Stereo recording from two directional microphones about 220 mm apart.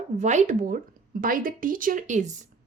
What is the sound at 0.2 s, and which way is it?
Speech, 30° right (ahead or behind).